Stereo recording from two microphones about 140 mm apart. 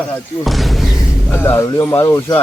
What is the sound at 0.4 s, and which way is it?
Speech, centre (ahead or behind).